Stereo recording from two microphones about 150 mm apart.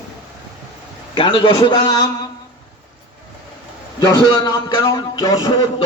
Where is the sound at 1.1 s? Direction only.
35° left (ahead or behind).